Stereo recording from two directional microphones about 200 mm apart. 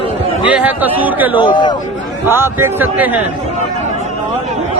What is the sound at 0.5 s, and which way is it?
Speech, 10° right (ahead or behind).